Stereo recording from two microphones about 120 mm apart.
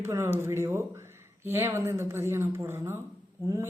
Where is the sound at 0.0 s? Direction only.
20° right (ahead or behind).